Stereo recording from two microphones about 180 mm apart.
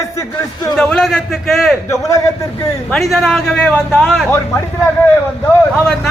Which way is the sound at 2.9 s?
Centre (ahead or behind).